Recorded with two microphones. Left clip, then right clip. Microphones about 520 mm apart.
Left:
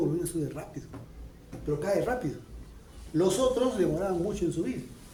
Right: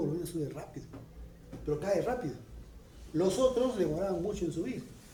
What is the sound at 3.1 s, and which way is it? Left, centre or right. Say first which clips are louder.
A man's voice: left 3 dB; right.